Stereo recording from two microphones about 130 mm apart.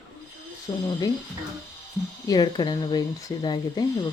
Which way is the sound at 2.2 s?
30° left (ahead or behind).